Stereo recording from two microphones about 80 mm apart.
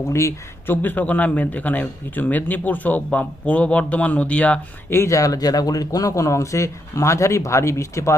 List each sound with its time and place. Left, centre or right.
0.1 s speech: left
0.8 s speech: left
4.9 s speech: left